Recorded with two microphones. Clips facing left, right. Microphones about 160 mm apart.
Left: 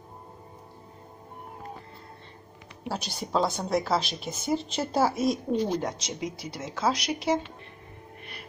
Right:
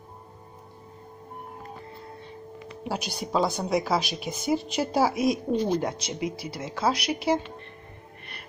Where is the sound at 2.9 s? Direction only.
10° right (ahead or behind).